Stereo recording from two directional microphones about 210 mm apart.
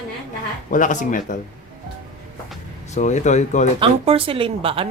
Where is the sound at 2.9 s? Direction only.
35° left (ahead or behind).